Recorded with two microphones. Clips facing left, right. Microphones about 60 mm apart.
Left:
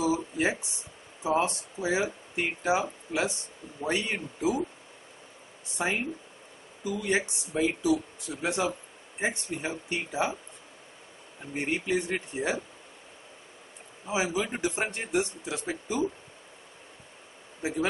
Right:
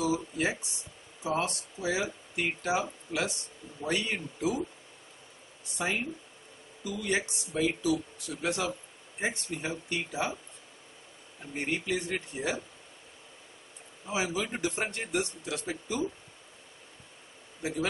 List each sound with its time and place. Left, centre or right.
0.0 s speech: left
5.8 s speech: left
11.5 s speech: left
14.0 s speech: centre
17.6 s speech: left